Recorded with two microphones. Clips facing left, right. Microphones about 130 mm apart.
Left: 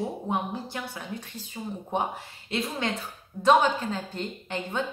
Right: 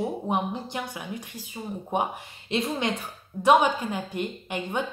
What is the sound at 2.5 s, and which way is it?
A woman's voice, 20° right (ahead or behind).